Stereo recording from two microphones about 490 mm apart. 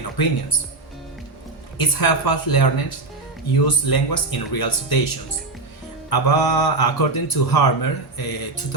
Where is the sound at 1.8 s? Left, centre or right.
Left.